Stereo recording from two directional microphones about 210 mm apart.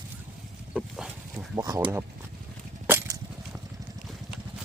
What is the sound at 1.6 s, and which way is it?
Speech, 15° right (ahead or behind).